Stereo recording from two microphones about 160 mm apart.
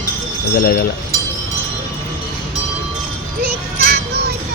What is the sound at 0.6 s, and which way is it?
Speech, 75° left (ahead or behind).